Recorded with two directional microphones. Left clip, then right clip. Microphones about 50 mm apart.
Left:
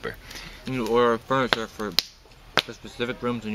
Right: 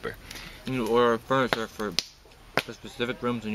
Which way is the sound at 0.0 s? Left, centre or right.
Centre.